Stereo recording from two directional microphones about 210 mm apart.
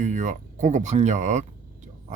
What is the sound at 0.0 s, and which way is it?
Speech, 35° right (ahead or behind).